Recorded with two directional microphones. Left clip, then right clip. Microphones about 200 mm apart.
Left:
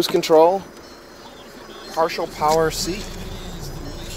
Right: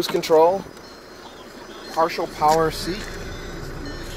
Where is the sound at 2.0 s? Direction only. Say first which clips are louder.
Even; centre (ahead or behind).